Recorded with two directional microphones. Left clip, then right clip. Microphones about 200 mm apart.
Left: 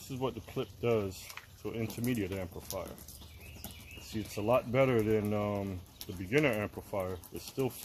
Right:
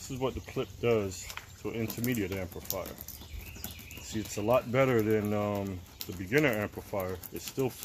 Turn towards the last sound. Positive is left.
turn(degrees=15)  # may be behind; listen again after turning